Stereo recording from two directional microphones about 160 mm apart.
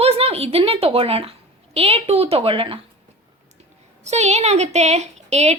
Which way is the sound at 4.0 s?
45° right (ahead or behind).